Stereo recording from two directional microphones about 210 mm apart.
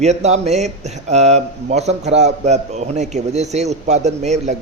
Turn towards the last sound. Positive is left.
turn(degrees=-35)  # may be behind; listen again after turning